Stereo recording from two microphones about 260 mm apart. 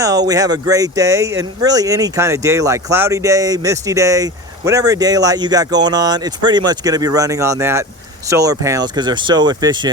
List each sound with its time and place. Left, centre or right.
0.3 s speech: centre